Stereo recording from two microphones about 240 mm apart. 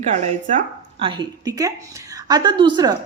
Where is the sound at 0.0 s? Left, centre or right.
Right.